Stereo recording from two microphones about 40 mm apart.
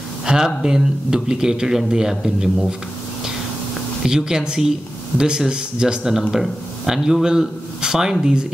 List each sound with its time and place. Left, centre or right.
0.2 s a sound: centre
0.6 s speech: centre
4.0 s speech: centre